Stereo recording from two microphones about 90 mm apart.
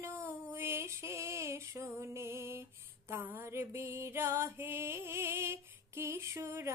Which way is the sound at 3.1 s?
25° right (ahead or behind).